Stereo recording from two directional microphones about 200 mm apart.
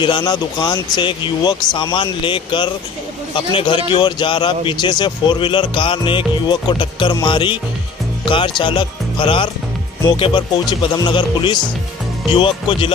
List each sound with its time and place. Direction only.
0.0 s speech: 20° left (ahead or behind)